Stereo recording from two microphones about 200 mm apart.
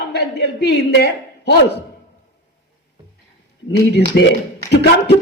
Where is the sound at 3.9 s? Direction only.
60° left (ahead or behind).